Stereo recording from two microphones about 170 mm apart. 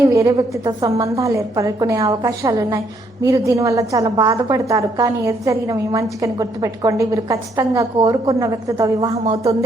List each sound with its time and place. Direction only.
0.1 s a woman's voice: 20° right (ahead or behind)
9.1 s speech: 35° right (ahead or behind)